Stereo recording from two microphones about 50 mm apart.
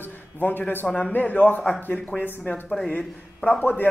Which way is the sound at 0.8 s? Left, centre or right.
Left.